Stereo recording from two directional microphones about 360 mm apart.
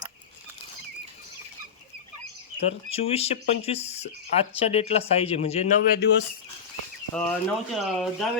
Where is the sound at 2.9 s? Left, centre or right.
Centre.